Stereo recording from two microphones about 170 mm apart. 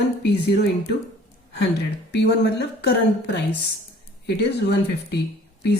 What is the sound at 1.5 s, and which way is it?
Speech, 85° left.